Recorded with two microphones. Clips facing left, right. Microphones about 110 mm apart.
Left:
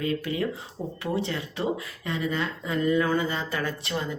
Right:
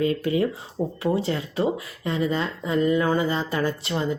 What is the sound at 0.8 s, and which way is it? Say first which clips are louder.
Speech: right 8 dB; 60° right (ahead or behind).